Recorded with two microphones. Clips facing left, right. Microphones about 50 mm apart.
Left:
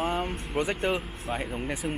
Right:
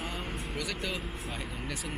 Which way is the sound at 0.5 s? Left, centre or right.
Left.